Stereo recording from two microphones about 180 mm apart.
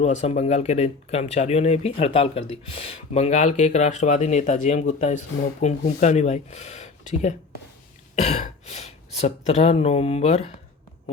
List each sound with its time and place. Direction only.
0.0 s speech: 40° left (ahead or behind)